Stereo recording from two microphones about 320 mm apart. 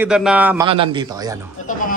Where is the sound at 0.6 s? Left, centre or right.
Centre.